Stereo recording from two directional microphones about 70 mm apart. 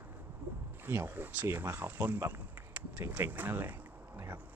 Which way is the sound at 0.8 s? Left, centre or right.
Right.